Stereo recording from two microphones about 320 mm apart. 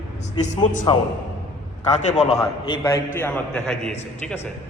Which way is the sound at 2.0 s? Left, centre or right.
Left.